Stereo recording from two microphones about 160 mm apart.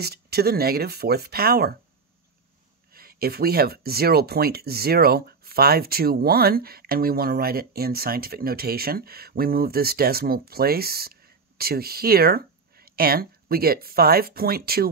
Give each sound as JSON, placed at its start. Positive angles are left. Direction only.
{"t": 0.0, "sound": "speech", "side_deg": -80}
{"t": 2.9, "sound": "speech", "side_deg": -70}